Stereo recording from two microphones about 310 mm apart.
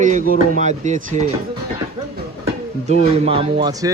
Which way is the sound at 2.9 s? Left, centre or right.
Right.